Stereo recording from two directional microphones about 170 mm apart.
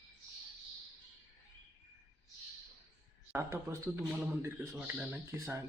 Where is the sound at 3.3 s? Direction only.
15° right (ahead or behind).